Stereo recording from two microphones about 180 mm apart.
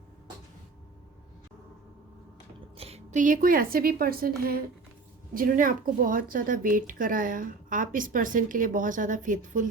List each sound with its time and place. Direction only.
2.7 s a woman's voice: 35° right (ahead or behind)